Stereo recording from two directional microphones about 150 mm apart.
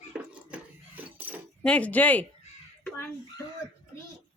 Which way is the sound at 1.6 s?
10° left (ahead or behind).